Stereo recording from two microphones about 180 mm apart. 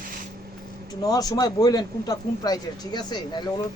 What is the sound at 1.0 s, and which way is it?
A man's voice, 20° left (ahead or behind).